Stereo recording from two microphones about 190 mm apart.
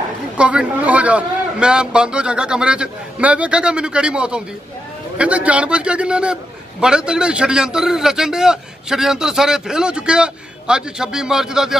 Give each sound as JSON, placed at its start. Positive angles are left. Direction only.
{"t": 0.4, "sound": "a man's voice", "side_deg": -5}